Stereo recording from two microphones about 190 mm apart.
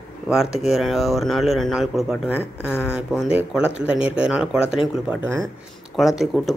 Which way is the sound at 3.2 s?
5° right (ahead or behind).